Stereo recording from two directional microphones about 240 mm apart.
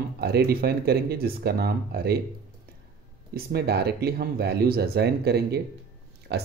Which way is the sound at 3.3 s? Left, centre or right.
Right.